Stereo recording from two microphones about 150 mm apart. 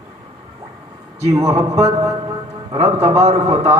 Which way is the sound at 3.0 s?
50° right (ahead or behind).